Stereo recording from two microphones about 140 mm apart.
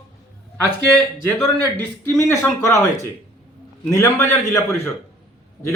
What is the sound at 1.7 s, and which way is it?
A man's voice, 20° left (ahead or behind).